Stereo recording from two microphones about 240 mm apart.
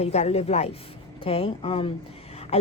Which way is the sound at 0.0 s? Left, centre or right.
Left.